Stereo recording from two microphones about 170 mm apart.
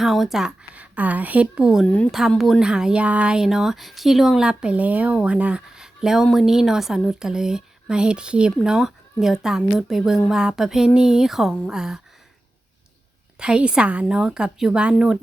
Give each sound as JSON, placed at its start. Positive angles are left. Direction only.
{"t": 0.0, "sound": "speech", "side_deg": 0}
{"t": 13.4, "sound": "speech", "side_deg": -5}